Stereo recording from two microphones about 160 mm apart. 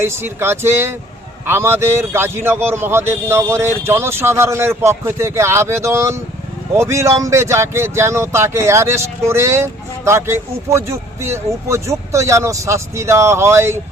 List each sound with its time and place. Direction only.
0.0 s speech: 15° right (ahead or behind)